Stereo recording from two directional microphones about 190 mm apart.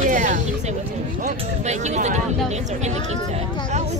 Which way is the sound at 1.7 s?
40° right (ahead or behind).